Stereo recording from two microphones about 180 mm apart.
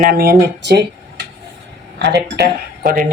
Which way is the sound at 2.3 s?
55° right (ahead or behind).